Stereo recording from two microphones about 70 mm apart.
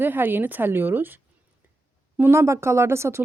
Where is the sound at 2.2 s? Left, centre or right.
Right.